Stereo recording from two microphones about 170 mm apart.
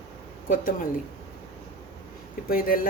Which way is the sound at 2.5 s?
60° left (ahead or behind).